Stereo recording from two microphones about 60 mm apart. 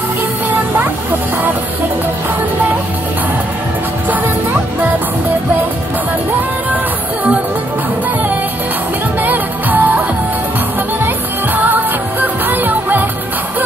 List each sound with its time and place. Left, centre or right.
9.2 s music: right
11.5 s music: right